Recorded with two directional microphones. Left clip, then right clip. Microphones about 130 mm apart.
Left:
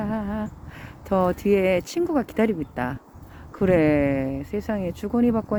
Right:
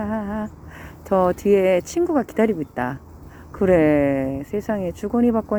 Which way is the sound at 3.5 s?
15° left (ahead or behind).